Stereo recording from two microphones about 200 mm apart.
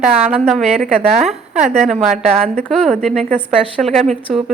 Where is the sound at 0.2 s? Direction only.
5° right (ahead or behind).